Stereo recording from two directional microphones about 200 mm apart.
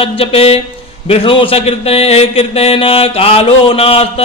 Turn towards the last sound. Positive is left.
turn(degrees=30)  # may be behind; listen again after turning